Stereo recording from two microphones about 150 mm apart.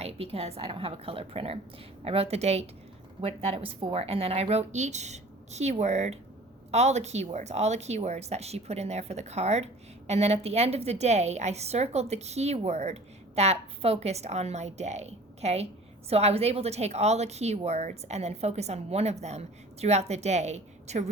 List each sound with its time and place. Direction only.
0.0 s a woman's voice: 40° right (ahead or behind)